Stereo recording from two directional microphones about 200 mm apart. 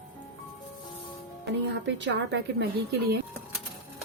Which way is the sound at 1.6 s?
60° right (ahead or behind).